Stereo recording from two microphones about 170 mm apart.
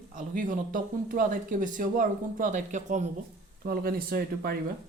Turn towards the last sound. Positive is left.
turn(degrees=-60)  # may be behind; listen again after turning